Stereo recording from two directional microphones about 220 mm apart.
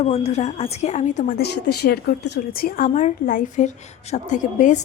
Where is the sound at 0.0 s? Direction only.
30° left (ahead or behind).